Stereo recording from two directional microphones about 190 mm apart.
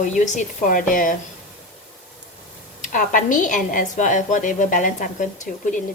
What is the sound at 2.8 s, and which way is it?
A woman's voice, 45° left (ahead or behind).